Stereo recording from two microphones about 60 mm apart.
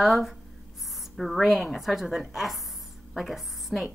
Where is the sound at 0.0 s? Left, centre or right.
Centre.